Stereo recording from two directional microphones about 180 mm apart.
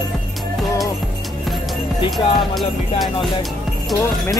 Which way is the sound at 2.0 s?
Centre (ahead or behind).